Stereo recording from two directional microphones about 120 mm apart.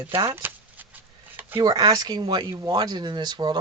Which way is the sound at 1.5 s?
35° right (ahead or behind).